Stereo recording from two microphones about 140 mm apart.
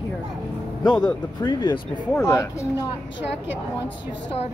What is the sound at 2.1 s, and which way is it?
Speech, 20° left (ahead or behind).